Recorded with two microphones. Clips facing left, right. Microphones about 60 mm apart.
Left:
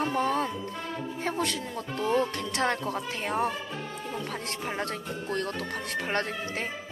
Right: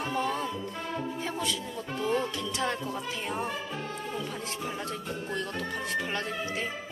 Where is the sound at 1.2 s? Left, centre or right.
Left.